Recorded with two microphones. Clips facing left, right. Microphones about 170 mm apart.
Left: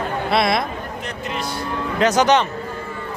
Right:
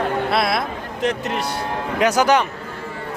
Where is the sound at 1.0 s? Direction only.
70° right (ahead or behind).